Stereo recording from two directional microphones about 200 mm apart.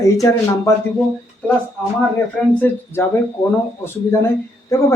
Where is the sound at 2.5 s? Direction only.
10° left (ahead or behind).